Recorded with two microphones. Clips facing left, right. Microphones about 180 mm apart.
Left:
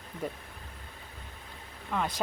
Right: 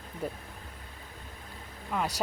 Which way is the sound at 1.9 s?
5° right (ahead or behind).